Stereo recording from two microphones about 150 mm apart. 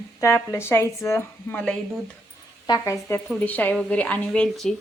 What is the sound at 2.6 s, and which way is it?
A woman's voice, 25° left (ahead or behind).